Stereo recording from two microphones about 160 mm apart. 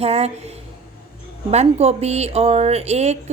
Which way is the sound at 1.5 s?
40° right (ahead or behind).